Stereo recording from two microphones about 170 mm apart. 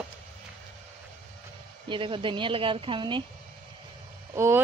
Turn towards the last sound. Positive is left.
turn(degrees=-15)  # may be behind; listen again after turning